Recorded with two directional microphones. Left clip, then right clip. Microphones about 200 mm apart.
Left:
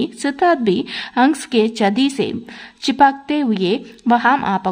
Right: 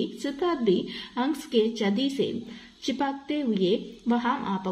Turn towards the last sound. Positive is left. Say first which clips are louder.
# left 13 dB
turn(degrees=40)  # may be behind; listen again after turning